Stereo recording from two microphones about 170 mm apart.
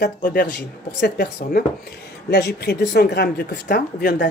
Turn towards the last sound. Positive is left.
turn(degrees=75)  # may be behind; listen again after turning